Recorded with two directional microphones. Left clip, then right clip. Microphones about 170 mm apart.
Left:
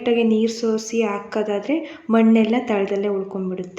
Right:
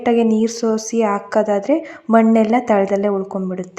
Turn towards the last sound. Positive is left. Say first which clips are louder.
# right 3 dB
turn(degrees=-30)  # may be behind; listen again after turning